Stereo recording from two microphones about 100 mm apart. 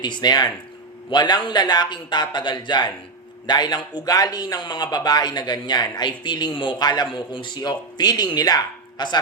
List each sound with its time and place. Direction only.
0.0 s a man's voice: 45° left (ahead or behind)